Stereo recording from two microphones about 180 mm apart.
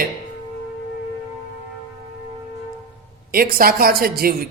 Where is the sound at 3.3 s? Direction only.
55° right (ahead or behind).